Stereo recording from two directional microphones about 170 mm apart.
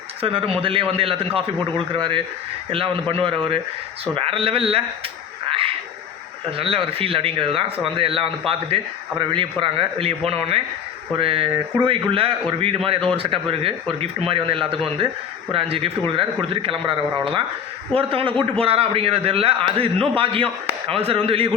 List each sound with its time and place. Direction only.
0.2 s a man's voice: 35° right (ahead or behind)
5.5 s a sound: 35° right (ahead or behind)
6.6 s a man's voice: 35° right (ahead or behind)